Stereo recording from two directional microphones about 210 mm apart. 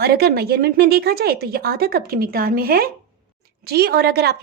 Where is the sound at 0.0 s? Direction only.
50° right (ahead or behind).